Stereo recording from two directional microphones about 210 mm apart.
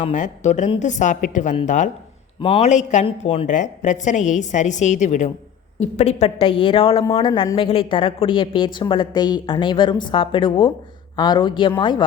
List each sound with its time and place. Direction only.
0.0 s a woman's voice: 35° left (ahead or behind)